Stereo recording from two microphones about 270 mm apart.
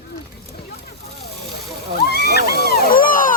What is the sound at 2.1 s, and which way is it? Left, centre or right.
Speech, left.